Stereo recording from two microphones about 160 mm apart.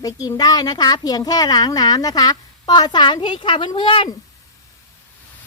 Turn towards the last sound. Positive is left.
turn(degrees=35)  # may be behind; listen again after turning